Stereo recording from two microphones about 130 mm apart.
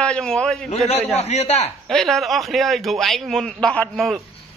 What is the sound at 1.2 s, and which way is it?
Speech, 55° left (ahead or behind).